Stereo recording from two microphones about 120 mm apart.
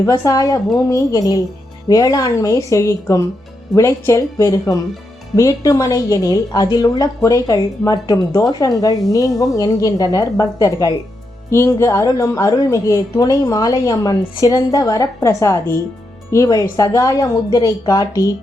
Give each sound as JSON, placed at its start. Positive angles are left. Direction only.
{"t": 0.0, "sound": "a woman's voice", "side_deg": 25}